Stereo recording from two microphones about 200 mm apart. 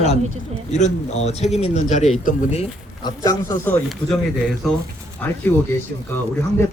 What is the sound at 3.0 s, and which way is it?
Speech, 20° left (ahead or behind).